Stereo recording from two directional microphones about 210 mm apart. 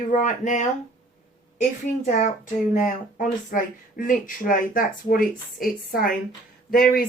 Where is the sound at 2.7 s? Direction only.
40° left (ahead or behind).